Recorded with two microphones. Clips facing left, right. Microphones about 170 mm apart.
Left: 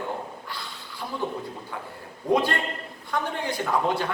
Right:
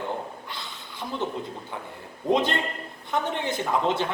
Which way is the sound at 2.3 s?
20° right (ahead or behind).